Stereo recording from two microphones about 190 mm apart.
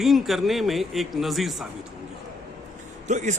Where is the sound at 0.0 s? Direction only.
Centre (ahead or behind).